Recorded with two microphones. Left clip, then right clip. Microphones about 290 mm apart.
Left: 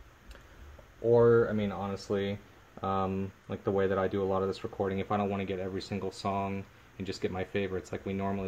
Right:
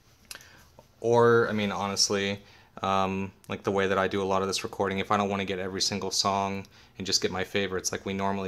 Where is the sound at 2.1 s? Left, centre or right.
Right.